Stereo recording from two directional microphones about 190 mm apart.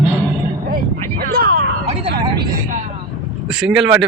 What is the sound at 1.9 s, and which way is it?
Vehicle, 30° right (ahead or behind).